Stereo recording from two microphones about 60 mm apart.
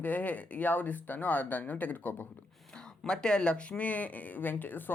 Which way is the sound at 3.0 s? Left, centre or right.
Centre.